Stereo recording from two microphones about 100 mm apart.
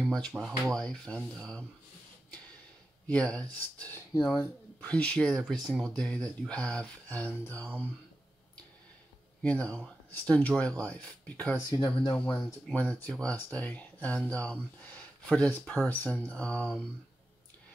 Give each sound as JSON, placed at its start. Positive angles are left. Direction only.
{"t": 0.0, "sound": "a sound", "side_deg": 10}
{"t": 0.4, "sound": "speech", "side_deg": 5}
{"t": 3.1, "sound": "speech", "side_deg": 15}
{"t": 9.4, "sound": "speech", "side_deg": 10}
{"t": 11.7, "sound": "speech", "side_deg": 50}
{"t": 12.7, "sound": "speech", "side_deg": 15}